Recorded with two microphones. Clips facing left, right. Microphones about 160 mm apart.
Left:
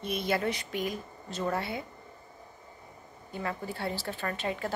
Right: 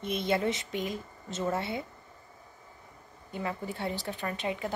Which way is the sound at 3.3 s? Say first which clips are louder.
Even; 20° right (ahead or behind).